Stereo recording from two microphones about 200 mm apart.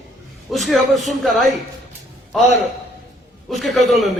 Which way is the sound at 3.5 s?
Centre (ahead or behind).